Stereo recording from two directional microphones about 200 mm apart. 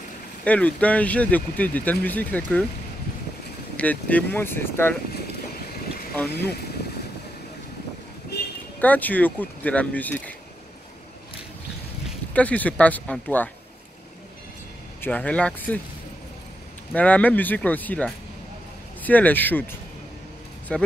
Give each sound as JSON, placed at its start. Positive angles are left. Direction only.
{"t": 0.5, "sound": "speech", "side_deg": 5}
{"t": 3.7, "sound": "speech", "side_deg": 5}
{"t": 8.3, "sound": "a sound", "side_deg": 55}
{"t": 8.8, "sound": "speech", "side_deg": 10}
{"t": 12.4, "sound": "speech", "side_deg": 5}
{"t": 15.0, "sound": "speech", "side_deg": 5}
{"t": 16.9, "sound": "speech", "side_deg": 5}
{"t": 20.7, "sound": "speech", "side_deg": 5}